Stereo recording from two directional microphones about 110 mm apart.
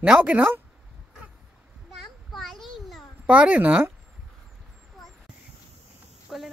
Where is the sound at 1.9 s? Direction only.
Centre (ahead or behind).